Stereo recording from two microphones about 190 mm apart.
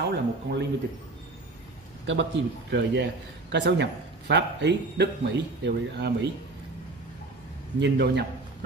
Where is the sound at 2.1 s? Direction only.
70° right (ahead or behind).